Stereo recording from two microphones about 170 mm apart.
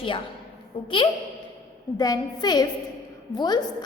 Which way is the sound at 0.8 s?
30° left (ahead or behind).